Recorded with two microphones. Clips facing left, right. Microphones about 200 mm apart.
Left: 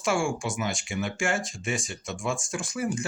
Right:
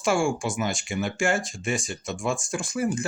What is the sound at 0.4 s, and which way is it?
Speech, 30° right (ahead or behind).